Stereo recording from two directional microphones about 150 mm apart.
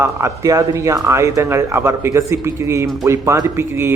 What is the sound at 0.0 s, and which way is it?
Speech, 20° right (ahead or behind).